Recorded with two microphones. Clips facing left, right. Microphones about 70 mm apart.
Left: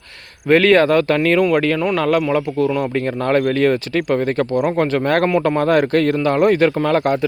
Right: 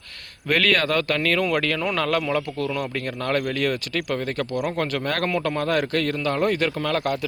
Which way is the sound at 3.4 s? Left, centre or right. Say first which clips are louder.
Left 9 dB; left.